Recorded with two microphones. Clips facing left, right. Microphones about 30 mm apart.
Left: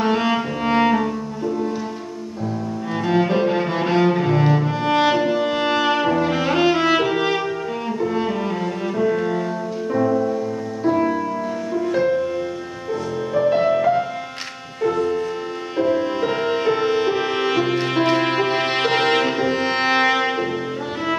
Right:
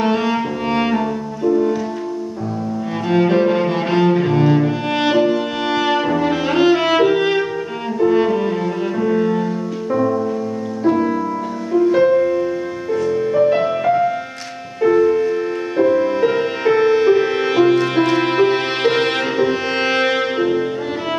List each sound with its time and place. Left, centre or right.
0.2 s music: centre
0.7 s music: centre
1.4 s music: centre
3.1 s music: centre
8.0 s music: centre
8.3 s music: centre
11.9 s music: centre
12.9 s music: centre
14.8 s music: right
15.8 s music: centre